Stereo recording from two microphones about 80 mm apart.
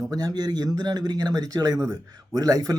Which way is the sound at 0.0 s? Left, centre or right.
Right.